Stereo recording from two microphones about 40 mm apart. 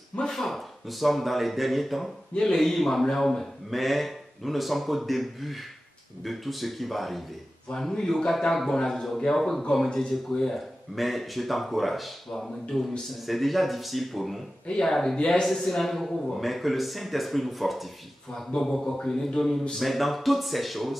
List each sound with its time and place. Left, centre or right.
0.3 s a man's voice: centre
8.2 s speech: centre
10.5 s a man's voice: centre
15.1 s speech: left
15.4 s a man's voice: centre
19.7 s a man's voice: centre